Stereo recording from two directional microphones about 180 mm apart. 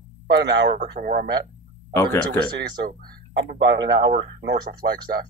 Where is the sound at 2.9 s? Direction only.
55° right (ahead or behind).